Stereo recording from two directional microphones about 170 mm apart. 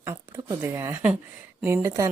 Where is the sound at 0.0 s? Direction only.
15° right (ahead or behind).